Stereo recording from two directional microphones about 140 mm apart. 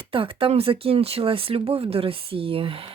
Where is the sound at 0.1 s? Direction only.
40° right (ahead or behind).